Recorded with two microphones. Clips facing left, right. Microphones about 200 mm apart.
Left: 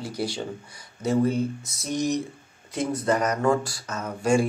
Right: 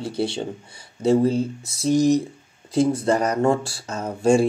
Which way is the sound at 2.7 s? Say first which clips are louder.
Right 5 dB; 30° right (ahead or behind).